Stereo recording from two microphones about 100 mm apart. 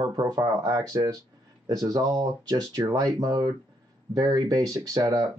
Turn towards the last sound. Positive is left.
turn(degrees=-35)  # may be behind; listen again after turning